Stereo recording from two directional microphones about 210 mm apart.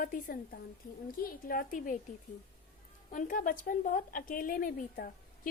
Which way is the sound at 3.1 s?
40° left (ahead or behind).